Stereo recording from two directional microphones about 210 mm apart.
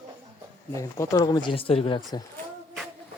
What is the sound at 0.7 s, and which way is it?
Speech, 15° left (ahead or behind).